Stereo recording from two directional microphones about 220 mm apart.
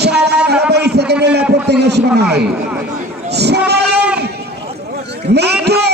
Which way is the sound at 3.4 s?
50° right (ahead or behind).